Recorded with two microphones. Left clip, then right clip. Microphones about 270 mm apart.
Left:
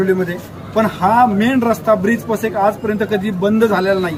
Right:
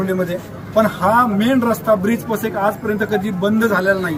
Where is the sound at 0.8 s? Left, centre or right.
Centre.